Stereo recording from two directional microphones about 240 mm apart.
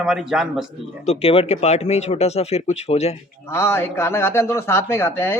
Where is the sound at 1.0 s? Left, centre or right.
Left.